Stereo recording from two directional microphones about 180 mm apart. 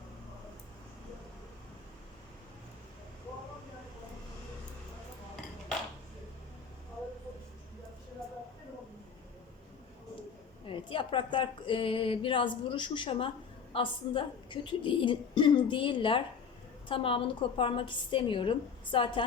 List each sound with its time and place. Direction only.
10.7 s speech: 30° left (ahead or behind)